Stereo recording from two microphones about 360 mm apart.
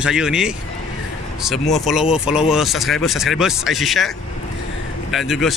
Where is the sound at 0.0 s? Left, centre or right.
Centre.